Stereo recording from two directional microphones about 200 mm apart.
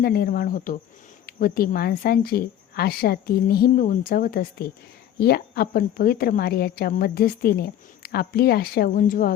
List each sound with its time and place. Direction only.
0.0 s a woman's voice: 50° left (ahead or behind)